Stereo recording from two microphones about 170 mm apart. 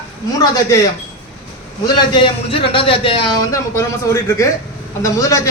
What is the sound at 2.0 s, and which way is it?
A man's voice, 30° left (ahead or behind).